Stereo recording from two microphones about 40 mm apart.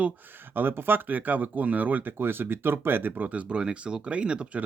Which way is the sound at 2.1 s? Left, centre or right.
Right.